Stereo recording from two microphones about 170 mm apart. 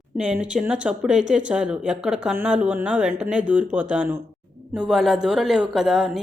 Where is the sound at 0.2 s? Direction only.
5° right (ahead or behind).